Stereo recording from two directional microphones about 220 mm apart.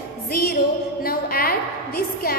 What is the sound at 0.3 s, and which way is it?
Music, 40° left (ahead or behind).